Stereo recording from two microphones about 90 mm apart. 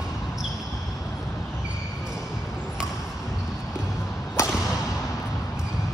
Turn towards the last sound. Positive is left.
turn(degrees=35)  # may be behind; listen again after turning